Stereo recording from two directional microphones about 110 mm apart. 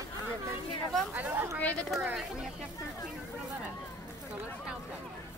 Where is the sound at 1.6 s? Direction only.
15° left (ahead or behind).